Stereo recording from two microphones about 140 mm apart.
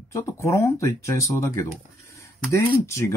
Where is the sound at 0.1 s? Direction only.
20° left (ahead or behind).